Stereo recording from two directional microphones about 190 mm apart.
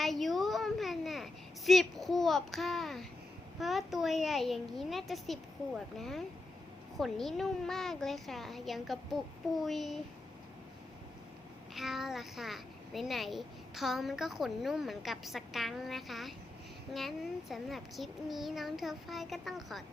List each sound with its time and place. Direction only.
0.0 s a sound: centre (ahead or behind)
3.6 s a child's voice: centre (ahead or behind)
11.7 s a child's voice: centre (ahead or behind)